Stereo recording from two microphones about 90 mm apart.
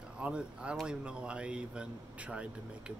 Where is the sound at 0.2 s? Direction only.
10° right (ahead or behind).